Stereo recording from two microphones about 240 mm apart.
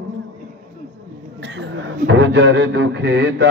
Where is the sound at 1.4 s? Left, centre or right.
Right.